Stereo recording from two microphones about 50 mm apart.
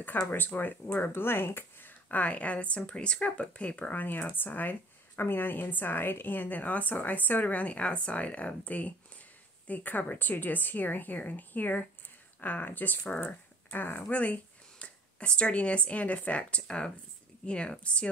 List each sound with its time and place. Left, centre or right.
0.0 s a woman's voice: left